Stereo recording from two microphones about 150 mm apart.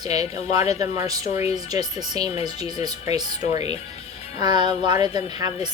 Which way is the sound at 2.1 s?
40° left (ahead or behind).